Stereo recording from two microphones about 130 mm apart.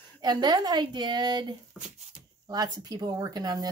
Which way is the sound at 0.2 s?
35° right (ahead or behind).